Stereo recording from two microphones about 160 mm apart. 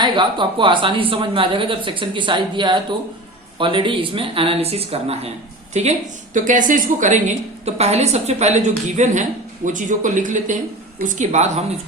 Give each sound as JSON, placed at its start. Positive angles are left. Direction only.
{"t": 0.0, "sound": "speech", "side_deg": -30}
{"t": 6.3, "sound": "a woman's voice", "side_deg": -55}